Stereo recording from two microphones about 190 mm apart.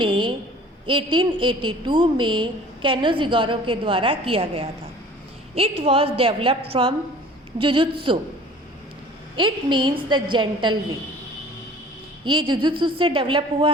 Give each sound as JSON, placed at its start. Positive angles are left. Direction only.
{"t": 0.0, "sound": "a sound", "side_deg": -25}
{"t": 0.9, "sound": "a woman's voice", "side_deg": -25}
{"t": 9.3, "sound": "a woman's voice", "side_deg": -25}
{"t": 12.2, "sound": "a woman's voice", "side_deg": -25}